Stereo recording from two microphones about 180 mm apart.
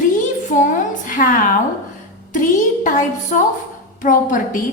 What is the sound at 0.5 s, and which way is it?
Speech, 45° left (ahead or behind).